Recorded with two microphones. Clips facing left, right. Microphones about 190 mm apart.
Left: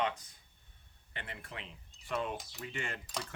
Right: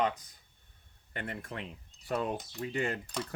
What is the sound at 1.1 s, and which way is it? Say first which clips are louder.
Speech: right 7 dB; 45° right (ahead or behind).